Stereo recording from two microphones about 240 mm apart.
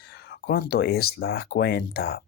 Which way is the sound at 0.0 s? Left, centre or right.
Left.